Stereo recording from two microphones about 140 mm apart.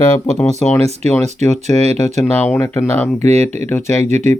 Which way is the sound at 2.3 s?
15° left (ahead or behind).